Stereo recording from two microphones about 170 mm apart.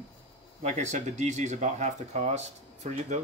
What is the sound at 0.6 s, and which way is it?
Speech, 45° right (ahead or behind).